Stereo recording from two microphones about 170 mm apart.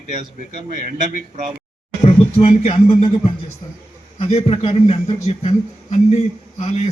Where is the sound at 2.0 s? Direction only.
35° left (ahead or behind).